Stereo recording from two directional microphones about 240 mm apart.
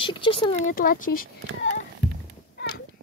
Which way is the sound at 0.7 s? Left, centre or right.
Left.